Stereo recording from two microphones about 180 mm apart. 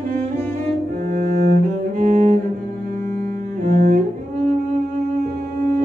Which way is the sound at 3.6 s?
45° right (ahead or behind).